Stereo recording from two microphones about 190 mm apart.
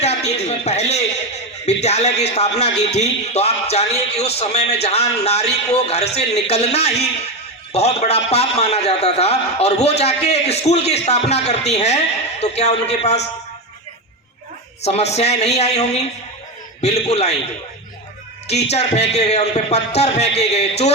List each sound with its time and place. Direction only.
0.0 s a sound: 35° left (ahead or behind)
0.4 s a man's voice: 35° left (ahead or behind)
14.8 s a man's voice: 35° left (ahead or behind)
18.4 s a man's voice: 35° left (ahead or behind)